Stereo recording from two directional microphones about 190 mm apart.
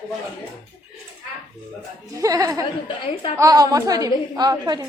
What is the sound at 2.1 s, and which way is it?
A woman's voice, 20° right (ahead or behind).